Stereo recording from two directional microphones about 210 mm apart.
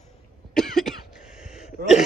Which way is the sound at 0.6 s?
Centre (ahead or behind).